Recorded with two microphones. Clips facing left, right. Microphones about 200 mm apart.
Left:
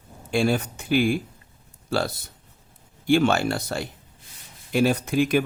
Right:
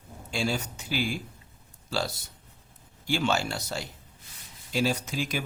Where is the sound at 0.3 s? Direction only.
55° left (ahead or behind).